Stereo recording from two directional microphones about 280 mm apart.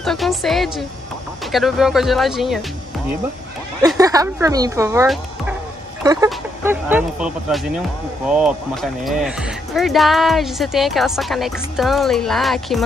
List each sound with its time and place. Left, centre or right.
0.0 s speech: centre
4.0 s speech: centre